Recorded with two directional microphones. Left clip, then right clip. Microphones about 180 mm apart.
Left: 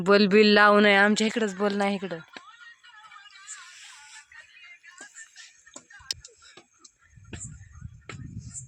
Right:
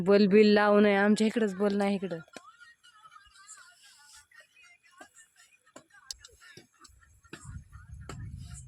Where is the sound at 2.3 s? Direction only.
75° right (ahead or behind).